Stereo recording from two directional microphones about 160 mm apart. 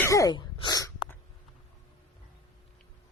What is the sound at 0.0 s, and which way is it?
Throat clearing, 20° left (ahead or behind).